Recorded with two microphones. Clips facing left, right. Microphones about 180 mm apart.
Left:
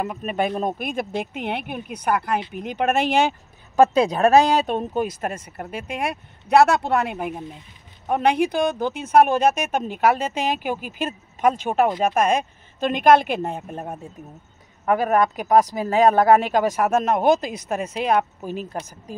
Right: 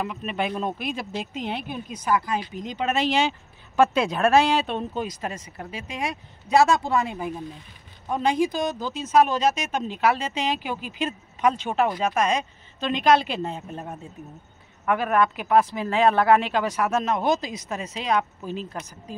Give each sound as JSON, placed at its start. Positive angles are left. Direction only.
{"t": 0.0, "sound": "speech", "side_deg": 45}
{"t": 14.9, "sound": "speech", "side_deg": 40}